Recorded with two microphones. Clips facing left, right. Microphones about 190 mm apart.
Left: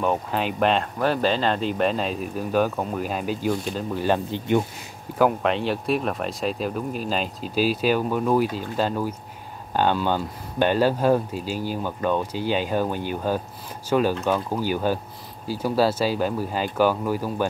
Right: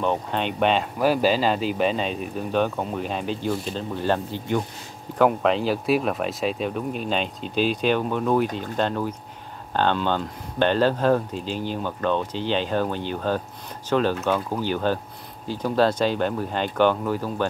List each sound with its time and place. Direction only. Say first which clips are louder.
0.0 s speech: left 1 dB; 5° left (ahead or behind)
5.2 s speech: right 1 dB; centre (ahead or behind)